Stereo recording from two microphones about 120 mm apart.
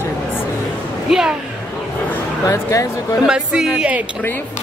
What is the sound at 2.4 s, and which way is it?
Speech, 25° left (ahead or behind).